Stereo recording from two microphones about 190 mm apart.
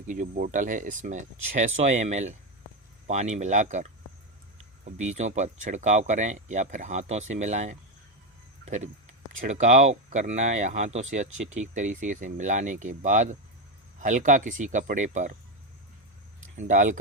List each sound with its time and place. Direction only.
0.1 s speech: 45° right (ahead or behind)
4.9 s speech: 40° right (ahead or behind)
16.6 s speech: 40° right (ahead or behind)